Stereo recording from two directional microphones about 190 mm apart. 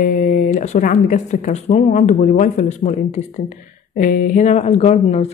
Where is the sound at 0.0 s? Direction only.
45° left (ahead or behind).